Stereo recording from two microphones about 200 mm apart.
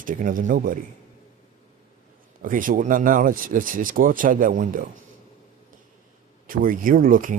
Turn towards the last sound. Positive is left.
turn(degrees=-45)  # may be behind; listen again after turning